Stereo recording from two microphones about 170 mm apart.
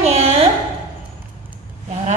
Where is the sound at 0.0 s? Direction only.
40° right (ahead or behind).